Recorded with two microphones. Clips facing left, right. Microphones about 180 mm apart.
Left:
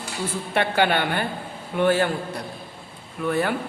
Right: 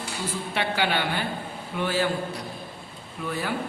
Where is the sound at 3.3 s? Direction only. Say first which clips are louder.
Left 7 dB; 55° left (ahead or behind).